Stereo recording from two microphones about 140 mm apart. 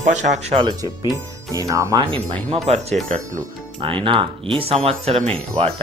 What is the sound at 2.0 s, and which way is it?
Speech, 40° right (ahead or behind).